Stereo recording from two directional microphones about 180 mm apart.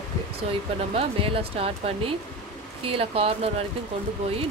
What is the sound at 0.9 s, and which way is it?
Speech, 30° right (ahead or behind).